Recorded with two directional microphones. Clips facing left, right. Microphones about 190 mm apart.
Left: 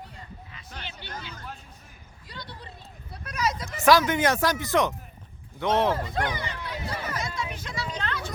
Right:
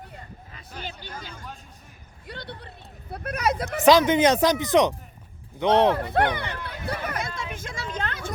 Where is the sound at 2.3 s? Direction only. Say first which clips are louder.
Right 4 dB; 60° right (ahead or behind).